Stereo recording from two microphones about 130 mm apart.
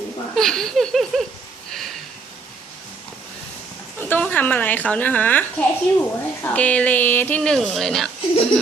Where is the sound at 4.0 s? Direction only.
15° left (ahead or behind).